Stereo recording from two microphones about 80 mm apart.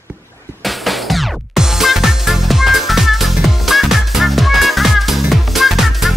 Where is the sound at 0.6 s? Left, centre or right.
Centre.